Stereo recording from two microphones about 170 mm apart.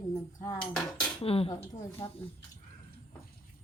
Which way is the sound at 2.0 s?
25° left (ahead or behind).